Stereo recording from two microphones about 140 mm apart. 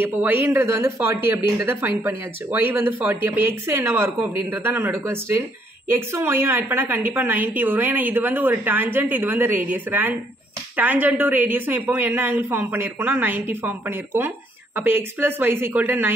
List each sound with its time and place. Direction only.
0.0 s speech: 15° right (ahead or behind)